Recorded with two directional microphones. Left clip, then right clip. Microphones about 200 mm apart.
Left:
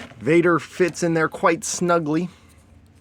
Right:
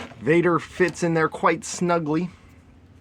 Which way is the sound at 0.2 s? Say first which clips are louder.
Left 2 dB; 25° left (ahead or behind).